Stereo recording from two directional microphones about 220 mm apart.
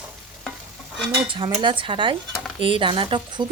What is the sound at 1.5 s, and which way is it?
Speech, 20° right (ahead or behind).